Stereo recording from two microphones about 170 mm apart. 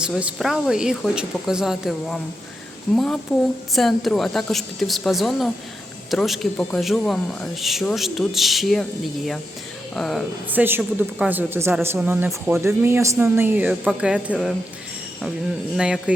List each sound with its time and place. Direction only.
0.0 s speech: 5° right (ahead or behind)
10.5 s speech: 10° right (ahead or behind)
15.7 s speech: 5° right (ahead or behind)